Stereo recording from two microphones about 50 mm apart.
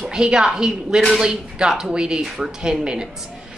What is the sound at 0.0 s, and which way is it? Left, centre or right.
A woman's voice, centre.